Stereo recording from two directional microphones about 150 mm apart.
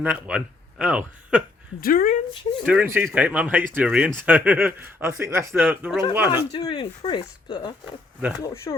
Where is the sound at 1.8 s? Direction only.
70° left (ahead or behind).